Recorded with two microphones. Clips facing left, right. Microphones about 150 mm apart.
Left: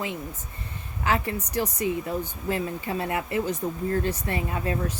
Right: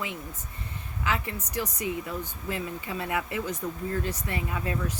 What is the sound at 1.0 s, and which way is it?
A woman's voice, 35° left (ahead or behind).